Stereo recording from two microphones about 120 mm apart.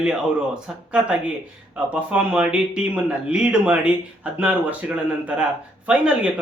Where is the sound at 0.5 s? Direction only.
10° right (ahead or behind).